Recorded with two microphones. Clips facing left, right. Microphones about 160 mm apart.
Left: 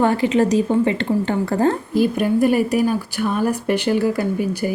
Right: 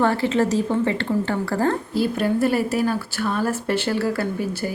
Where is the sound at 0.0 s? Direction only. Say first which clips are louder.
Left 3 dB; 15° left (ahead or behind).